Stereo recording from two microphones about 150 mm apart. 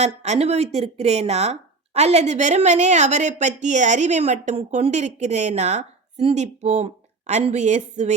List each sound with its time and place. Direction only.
0.0 s speech: 50° right (ahead or behind)